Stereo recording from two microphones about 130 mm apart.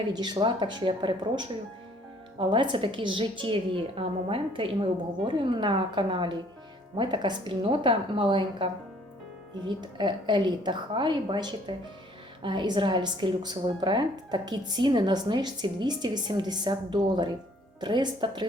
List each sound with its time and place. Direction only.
0.1 s speech: 35° right (ahead or behind)